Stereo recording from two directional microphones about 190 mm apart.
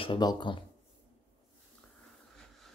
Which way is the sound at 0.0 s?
25° left (ahead or behind).